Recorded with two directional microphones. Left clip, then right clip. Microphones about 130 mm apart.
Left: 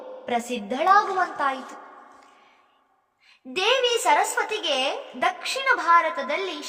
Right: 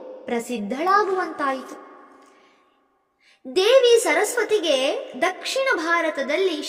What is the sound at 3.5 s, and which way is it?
A woman's voice, 45° right (ahead or behind).